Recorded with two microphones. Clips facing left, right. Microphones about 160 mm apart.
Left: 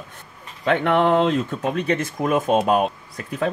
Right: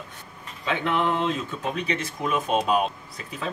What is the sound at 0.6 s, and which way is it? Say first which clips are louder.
Speech: left 7 dB; 60° left (ahead or behind).